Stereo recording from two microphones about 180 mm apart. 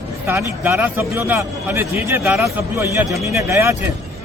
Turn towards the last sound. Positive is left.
turn(degrees=-15)  # may be behind; listen again after turning